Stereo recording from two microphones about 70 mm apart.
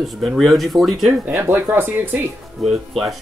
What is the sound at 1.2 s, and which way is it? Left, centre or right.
Speech, right.